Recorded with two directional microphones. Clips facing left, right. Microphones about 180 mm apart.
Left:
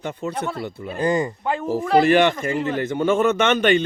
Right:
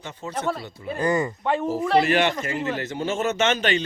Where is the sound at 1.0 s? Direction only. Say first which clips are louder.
Left 2 dB; 25° left (ahead or behind).